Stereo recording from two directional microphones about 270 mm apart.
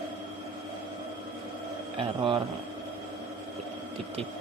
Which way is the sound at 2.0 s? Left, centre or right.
Centre.